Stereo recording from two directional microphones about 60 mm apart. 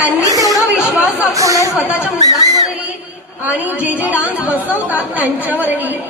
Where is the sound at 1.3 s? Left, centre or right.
Right.